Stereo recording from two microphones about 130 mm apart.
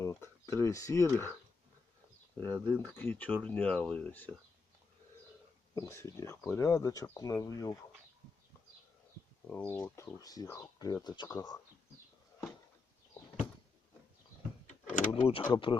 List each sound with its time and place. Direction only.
0.0 s speech: 25° left (ahead or behind)
2.4 s speech: 15° left (ahead or behind)
5.7 s speech: 25° left (ahead or behind)
9.5 s speech: 10° left (ahead or behind); by 11.6 s 30° left (ahead or behind)
15.1 s speech: 45° left (ahead or behind)